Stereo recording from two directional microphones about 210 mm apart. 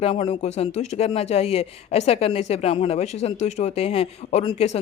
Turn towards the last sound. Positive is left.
turn(degrees=30)  # may be behind; listen again after turning